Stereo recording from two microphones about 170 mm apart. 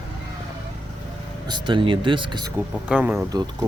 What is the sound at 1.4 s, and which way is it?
Speech, 30° right (ahead or behind).